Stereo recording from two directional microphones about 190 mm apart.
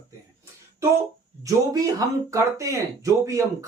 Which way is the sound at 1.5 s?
20° right (ahead or behind).